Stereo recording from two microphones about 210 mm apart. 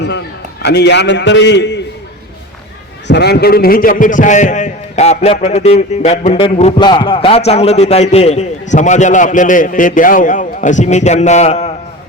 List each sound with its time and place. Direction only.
0.0 s a man's voice: 55° left (ahead or behind)
3.1 s a man's voice: 50° left (ahead or behind); by 11.7 s 35° left (ahead or behind)